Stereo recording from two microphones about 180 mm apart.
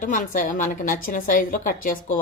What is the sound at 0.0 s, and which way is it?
Speech, 45° left (ahead or behind).